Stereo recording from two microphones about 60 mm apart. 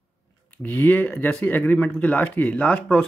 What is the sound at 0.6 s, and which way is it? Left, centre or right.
Speech, left.